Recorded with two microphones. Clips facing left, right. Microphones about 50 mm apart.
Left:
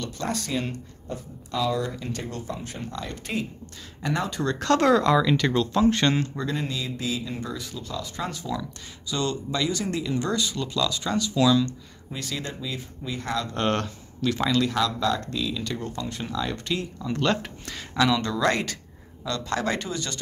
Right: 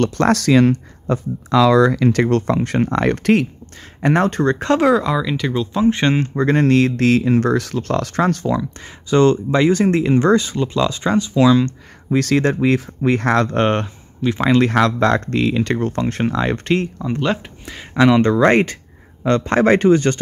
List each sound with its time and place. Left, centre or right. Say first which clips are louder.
0.0 s speech: right 14 dB; right
4.0 s speech: right 11 dB; right
4.7 s speech: right 1 dB; centre
5.9 s speech: right 5 dB; right
6.6 s speech: right 16 dB; right
8.5 s speech: right 9 dB; right
12.1 s speech: right 17 dB; right
13.6 s speech: right 8 dB; right
14.4 s speech: right 9 dB; right
14.7 s speech: right 9 dB; right
17.2 s speech: right 2 dB; centre
17.9 s speech: right 10 dB; right